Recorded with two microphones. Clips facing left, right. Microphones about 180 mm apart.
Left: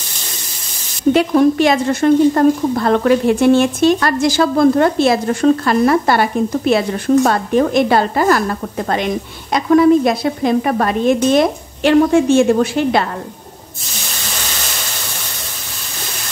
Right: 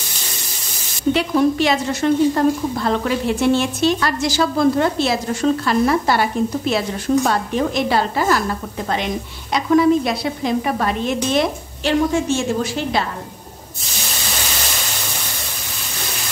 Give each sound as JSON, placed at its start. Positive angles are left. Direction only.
{"t": 1.1, "sound": "a woman's voice", "side_deg": 50}